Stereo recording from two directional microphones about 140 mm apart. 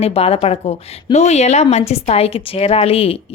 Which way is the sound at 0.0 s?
45° left (ahead or behind).